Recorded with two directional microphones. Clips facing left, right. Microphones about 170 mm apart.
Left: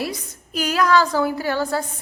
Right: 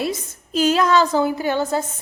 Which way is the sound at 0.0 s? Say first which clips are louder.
Right 3 dB; 25° right (ahead or behind).